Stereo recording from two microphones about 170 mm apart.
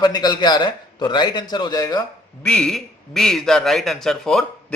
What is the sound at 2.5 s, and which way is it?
A man's voice, 5° left (ahead or behind).